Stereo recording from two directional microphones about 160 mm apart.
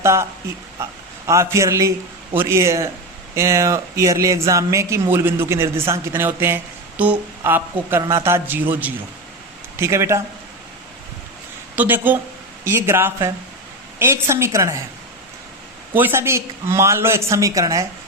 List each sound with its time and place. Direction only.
0.0 s a man's voice: 15° right (ahead or behind)
11.8 s speech: 10° right (ahead or behind)
16.0 s speech: 15° right (ahead or behind)